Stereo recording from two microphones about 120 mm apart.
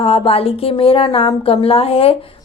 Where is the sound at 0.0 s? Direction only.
55° left (ahead or behind).